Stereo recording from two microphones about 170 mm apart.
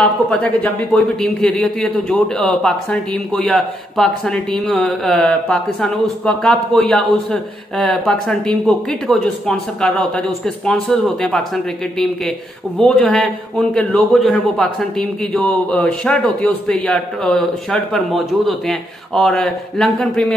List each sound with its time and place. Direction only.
0.0 s a man's voice: 5° left (ahead or behind)